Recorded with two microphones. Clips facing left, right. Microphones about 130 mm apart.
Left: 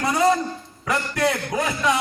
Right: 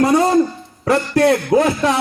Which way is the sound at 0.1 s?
30° right (ahead or behind).